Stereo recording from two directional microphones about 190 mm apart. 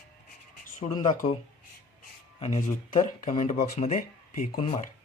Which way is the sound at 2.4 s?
40° left (ahead or behind).